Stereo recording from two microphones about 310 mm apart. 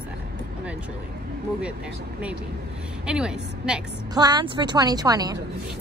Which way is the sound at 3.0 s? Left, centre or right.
Centre.